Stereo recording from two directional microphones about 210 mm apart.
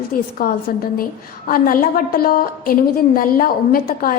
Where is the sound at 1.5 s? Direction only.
40° left (ahead or behind).